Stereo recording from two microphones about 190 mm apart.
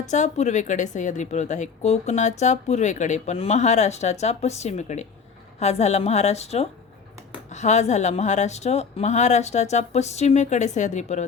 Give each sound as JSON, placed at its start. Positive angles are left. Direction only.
{"t": 0.1, "sound": "a woman's voice", "side_deg": 40}